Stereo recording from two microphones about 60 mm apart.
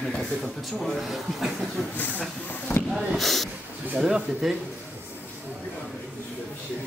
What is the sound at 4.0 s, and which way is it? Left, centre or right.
Speech, centre.